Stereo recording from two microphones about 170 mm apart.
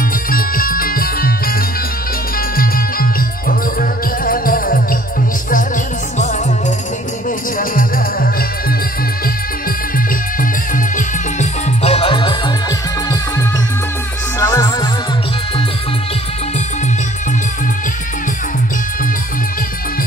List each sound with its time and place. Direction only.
0.3 s music: 60° left (ahead or behind)
2.5 s music: 60° left (ahead or behind)
7.5 s music: 55° left (ahead or behind)
11.0 s music: 40° left (ahead or behind); by 14.9 s 20° left (ahead or behind)